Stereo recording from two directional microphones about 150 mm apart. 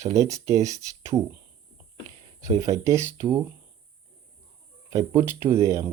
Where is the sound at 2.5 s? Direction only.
20° right (ahead or behind).